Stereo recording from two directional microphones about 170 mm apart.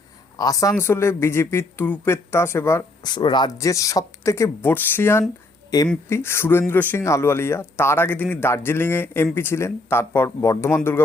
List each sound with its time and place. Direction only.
0.3 s a man's voice: 20° left (ahead or behind)